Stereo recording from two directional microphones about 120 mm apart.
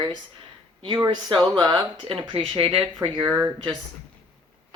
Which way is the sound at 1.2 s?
40° right (ahead or behind).